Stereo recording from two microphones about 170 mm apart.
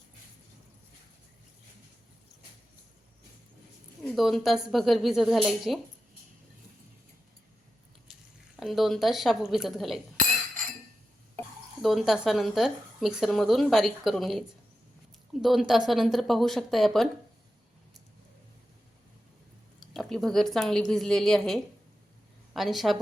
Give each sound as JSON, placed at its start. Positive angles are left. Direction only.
{"t": 4.1, "sound": "a woman's voice", "side_deg": 0}
{"t": 8.5, "sound": "a woman's voice", "side_deg": 0}
{"t": 10.2, "sound": "chink", "side_deg": -55}
{"t": 11.8, "sound": "a woman's voice", "side_deg": 0}
{"t": 19.8, "sound": "a woman's voice", "side_deg": 0}